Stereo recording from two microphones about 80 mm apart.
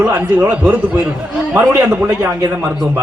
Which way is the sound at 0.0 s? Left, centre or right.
Right.